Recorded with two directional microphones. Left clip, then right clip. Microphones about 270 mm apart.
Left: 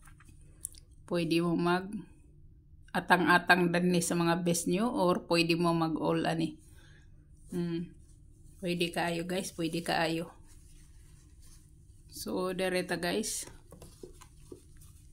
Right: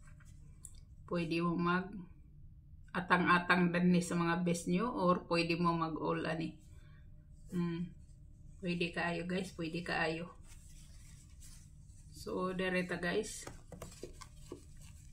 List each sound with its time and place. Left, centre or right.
0.6 s clicking: left
2.9 s a woman's voice: left
12.1 s a woman's voice: left